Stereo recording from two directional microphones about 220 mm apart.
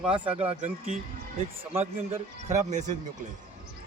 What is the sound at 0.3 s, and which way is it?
Speech, 30° right (ahead or behind).